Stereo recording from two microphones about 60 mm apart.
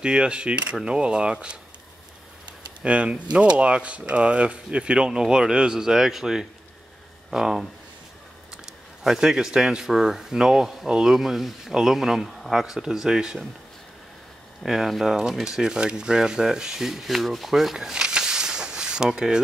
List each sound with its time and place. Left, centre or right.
0.0 s speech: centre
2.8 s speech: centre
8.6 s speech: centre
14.6 s speech: centre